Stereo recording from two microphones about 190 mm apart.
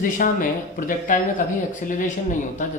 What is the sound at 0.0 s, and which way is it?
Speech, 45° left (ahead or behind).